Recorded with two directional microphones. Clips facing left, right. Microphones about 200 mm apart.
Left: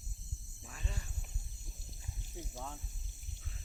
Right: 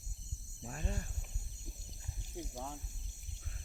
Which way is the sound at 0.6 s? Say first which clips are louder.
Right 6 dB; 45° right (ahead or behind).